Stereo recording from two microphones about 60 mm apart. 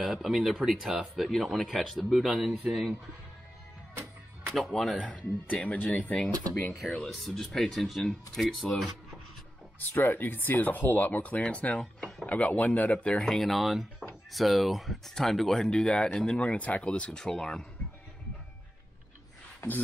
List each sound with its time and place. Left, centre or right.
0.0 s speech: centre
4.6 s speech: centre
5.0 s speech: left
7.1 s speech: centre
9.8 s speech: left
13.2 s speech: centre; by 17.2 s left
17.2 s speech: centre
19.6 s beatboxing: left